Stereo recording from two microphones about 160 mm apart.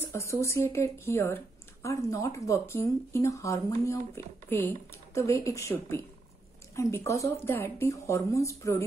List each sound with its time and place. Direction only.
0.0 s speech: 15° left (ahead or behind)